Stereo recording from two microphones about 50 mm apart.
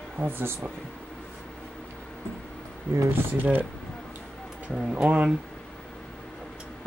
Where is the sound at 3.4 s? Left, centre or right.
Right.